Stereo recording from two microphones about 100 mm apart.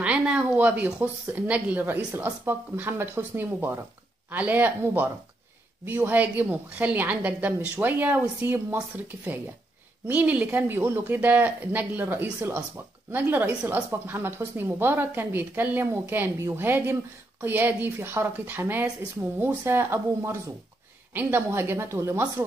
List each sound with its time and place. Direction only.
0.0 s a woman's voice: 10° right (ahead or behind); by 22.2 s 30° right (ahead or behind)